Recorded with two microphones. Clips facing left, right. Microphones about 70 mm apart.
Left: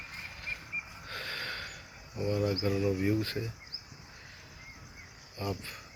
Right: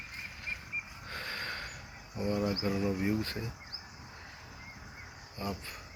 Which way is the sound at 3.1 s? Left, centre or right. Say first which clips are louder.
Left 2 dB; right.